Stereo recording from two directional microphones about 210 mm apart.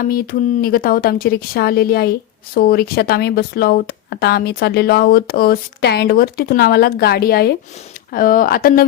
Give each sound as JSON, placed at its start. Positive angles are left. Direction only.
{"t": 0.0, "sound": "speech", "side_deg": 45}